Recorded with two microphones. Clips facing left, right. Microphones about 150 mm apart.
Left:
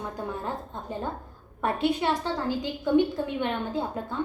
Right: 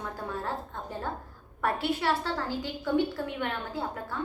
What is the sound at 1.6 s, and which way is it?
A woman's voice, 20° left (ahead or behind).